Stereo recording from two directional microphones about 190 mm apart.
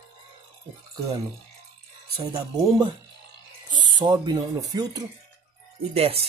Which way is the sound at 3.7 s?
20° right (ahead or behind).